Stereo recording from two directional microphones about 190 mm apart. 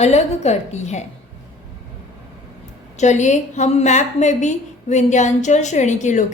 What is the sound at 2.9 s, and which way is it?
A woman's voice, 40° left (ahead or behind).